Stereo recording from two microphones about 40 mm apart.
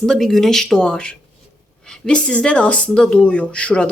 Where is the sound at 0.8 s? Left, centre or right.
Centre.